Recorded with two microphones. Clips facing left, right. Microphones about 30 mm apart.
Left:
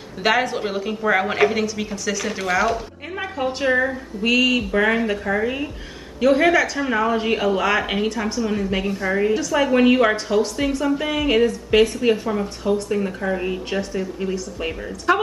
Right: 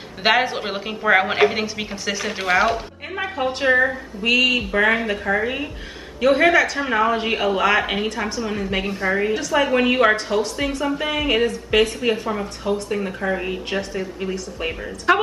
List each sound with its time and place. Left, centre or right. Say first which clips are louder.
0.2 s a woman's voice: right 1 dB; right